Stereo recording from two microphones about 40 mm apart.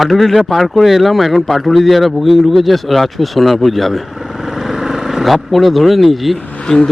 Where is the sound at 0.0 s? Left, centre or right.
Centre.